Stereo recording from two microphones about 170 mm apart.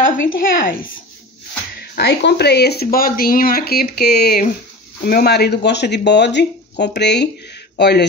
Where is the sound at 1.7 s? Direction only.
75° left (ahead or behind).